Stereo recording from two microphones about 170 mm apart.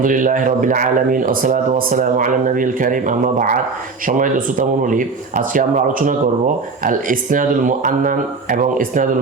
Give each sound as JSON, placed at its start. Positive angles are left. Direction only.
{"t": 0.0, "sound": "speech", "side_deg": -50}